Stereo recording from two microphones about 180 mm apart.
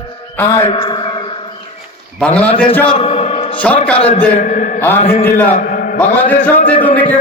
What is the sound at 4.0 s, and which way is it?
Speech, 35° left (ahead or behind).